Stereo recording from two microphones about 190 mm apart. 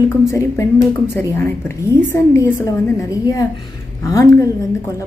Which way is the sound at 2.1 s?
15° left (ahead or behind).